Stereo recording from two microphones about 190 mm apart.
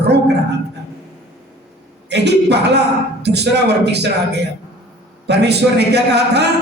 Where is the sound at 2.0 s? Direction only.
65° right (ahead or behind).